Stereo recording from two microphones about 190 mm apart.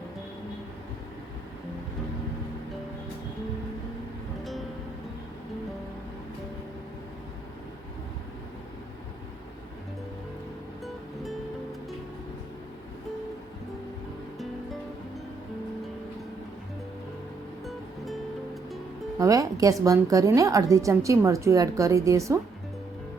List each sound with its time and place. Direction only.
10.8 s music: centre (ahead or behind)
17.7 s music: centre (ahead or behind)
19.2 s a woman's voice: 20° right (ahead or behind)